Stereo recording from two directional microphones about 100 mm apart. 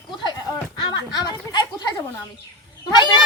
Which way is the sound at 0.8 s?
45° left (ahead or behind).